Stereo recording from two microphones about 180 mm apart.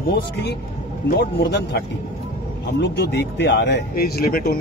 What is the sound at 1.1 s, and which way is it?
Speech, 65° left (ahead or behind).